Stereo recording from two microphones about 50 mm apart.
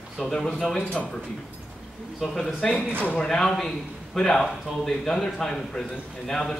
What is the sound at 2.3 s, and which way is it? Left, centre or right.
Speech, centre.